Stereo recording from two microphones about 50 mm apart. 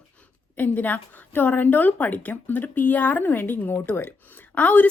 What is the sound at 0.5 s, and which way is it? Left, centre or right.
Speech, left.